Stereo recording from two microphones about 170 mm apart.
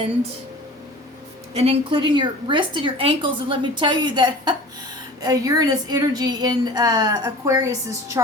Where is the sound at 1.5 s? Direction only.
35° right (ahead or behind).